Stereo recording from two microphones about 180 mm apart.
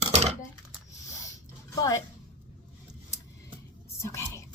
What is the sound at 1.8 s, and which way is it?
Speech, 20° left (ahead or behind).